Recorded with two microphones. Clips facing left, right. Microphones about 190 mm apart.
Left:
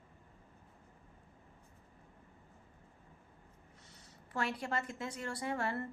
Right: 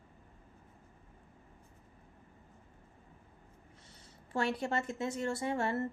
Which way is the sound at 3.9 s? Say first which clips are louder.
Right 5 dB; 25° right (ahead or behind).